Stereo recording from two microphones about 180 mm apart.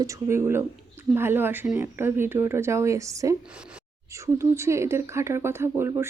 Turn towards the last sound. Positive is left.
turn(degrees=-15)  # may be behind; listen again after turning